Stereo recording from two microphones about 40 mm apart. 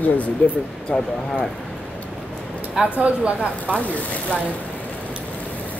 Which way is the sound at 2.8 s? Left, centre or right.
Right.